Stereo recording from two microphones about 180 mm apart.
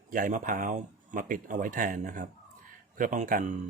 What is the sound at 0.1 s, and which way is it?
Speech, 50° right (ahead or behind).